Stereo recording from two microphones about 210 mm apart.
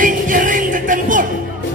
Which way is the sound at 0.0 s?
40° right (ahead or behind).